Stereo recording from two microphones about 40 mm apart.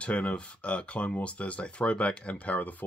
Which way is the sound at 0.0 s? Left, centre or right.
Left.